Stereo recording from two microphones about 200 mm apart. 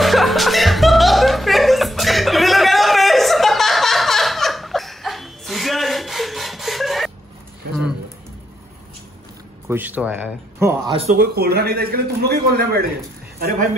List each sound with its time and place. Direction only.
0.0 s music: centre (ahead or behind)
9.7 s speech: 10° right (ahead or behind)
10.9 s speech: 30° right (ahead or behind)
11.1 s a man's voice: 50° right (ahead or behind)